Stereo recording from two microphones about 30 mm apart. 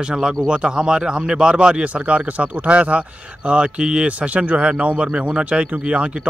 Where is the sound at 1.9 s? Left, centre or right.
Right.